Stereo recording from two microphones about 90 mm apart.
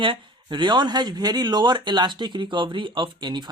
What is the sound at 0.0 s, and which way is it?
Speech, 70° right (ahead or behind).